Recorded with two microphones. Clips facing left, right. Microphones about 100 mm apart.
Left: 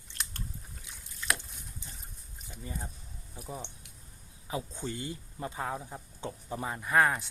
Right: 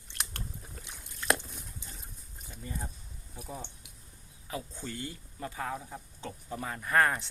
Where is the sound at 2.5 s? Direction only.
10° left (ahead or behind).